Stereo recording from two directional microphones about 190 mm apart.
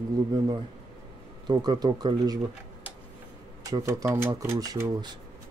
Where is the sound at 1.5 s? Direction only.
20° right (ahead or behind).